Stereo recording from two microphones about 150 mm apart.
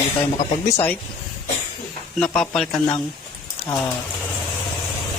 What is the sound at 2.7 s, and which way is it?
Speech, 30° left (ahead or behind).